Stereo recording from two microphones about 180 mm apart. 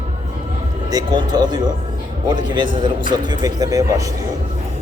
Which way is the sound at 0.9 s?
20° right (ahead or behind).